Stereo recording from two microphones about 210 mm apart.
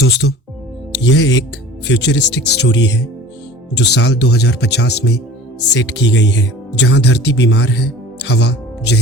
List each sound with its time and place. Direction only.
0.0 s speech: 55° left (ahead or behind)